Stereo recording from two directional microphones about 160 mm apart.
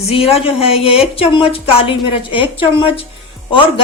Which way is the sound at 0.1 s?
35° left (ahead or behind).